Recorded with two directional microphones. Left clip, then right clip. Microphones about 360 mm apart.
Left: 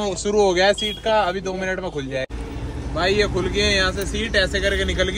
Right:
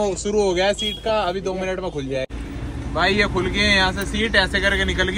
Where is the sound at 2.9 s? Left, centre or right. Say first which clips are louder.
Right 1 dB; centre.